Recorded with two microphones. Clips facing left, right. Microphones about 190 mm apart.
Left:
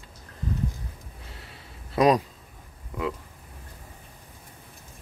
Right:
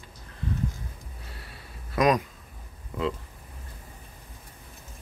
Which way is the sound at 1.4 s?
30° left (ahead or behind).